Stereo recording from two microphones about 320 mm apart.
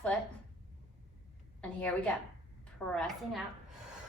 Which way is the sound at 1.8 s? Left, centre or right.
Centre.